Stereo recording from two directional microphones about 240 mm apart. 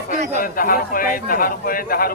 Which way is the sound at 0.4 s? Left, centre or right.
Left.